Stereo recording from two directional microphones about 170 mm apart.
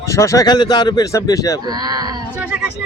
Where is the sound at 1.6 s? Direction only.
25° right (ahead or behind).